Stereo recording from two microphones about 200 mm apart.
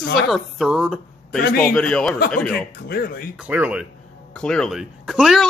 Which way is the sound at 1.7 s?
5° left (ahead or behind).